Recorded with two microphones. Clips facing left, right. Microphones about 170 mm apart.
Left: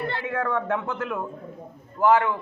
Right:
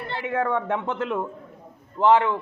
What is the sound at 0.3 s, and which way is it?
A man's voice, 20° right (ahead or behind).